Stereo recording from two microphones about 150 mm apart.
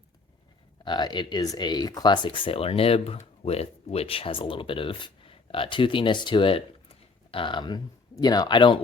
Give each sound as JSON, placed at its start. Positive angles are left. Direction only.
{"t": 0.9, "sound": "speech", "side_deg": 30}